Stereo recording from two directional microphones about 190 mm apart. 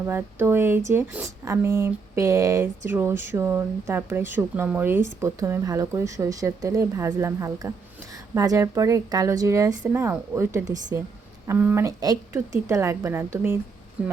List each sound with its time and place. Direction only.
0.0 s speech: 10° right (ahead or behind)